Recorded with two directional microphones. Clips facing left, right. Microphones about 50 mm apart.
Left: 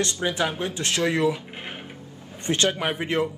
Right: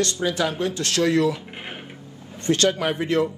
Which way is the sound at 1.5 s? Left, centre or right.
Centre.